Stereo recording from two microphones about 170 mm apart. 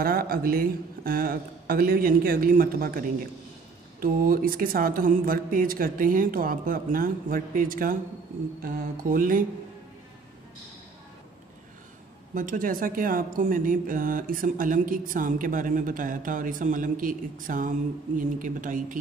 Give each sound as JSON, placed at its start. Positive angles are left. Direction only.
{"t": 0.0, "sound": "speech", "side_deg": -60}
{"t": 12.4, "sound": "speech", "side_deg": -50}